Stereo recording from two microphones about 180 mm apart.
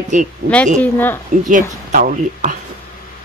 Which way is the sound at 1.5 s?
45° right (ahead or behind).